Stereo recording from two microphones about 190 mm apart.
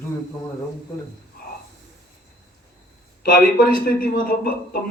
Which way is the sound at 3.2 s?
50° left (ahead or behind).